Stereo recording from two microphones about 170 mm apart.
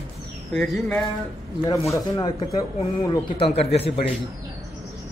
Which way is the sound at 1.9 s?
20° left (ahead or behind).